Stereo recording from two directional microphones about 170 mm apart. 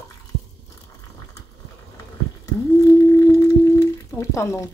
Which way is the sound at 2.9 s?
20° left (ahead or behind).